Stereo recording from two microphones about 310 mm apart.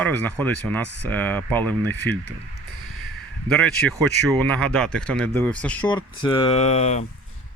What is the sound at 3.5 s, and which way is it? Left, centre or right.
Speech, centre.